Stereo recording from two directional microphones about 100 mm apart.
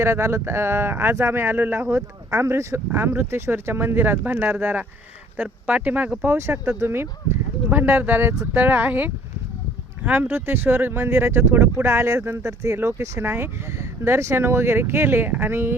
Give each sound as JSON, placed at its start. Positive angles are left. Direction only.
{"t": 0.0, "sound": "speech", "side_deg": -25}